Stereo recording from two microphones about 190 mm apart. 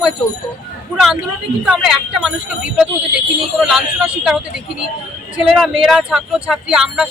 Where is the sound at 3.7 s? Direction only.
Centre (ahead or behind).